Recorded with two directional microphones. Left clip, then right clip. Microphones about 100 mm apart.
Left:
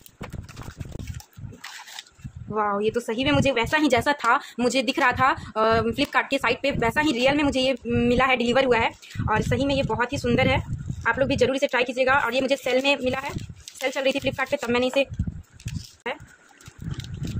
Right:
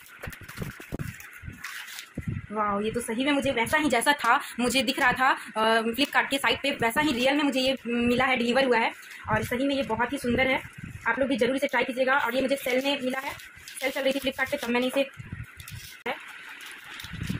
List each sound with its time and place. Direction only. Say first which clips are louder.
2.5 s a woman's voice: left 4 dB; 55° left (ahead or behind)